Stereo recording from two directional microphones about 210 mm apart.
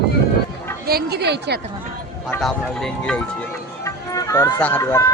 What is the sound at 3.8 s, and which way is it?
Speech, 15° left (ahead or behind).